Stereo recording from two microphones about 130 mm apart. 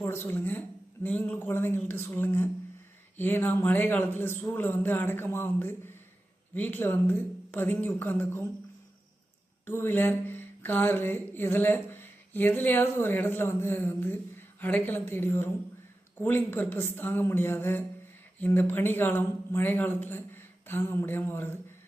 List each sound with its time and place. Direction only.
0.0 s a man's voice: 20° left (ahead or behind)
9.6 s a sound: 15° left (ahead or behind)
16.1 s a man's voice: 15° left (ahead or behind)